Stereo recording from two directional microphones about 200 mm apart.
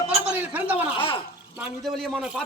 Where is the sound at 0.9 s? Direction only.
25° left (ahead or behind).